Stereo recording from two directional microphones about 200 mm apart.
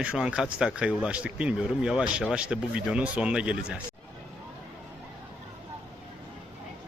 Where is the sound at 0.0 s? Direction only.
5° right (ahead or behind).